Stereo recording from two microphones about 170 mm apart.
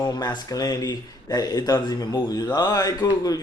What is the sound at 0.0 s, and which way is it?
A man's voice, 25° left (ahead or behind).